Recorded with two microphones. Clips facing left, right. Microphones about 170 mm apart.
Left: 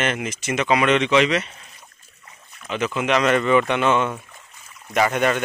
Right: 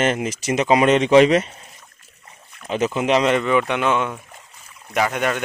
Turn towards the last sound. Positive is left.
turn(degrees=0)  # may be behind; listen again after turning